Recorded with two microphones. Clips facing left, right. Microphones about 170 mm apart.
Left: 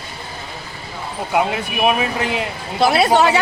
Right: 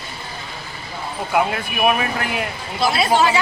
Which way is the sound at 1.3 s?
20° left (ahead or behind).